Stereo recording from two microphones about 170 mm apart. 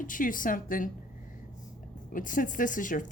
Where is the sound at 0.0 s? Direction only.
50° left (ahead or behind).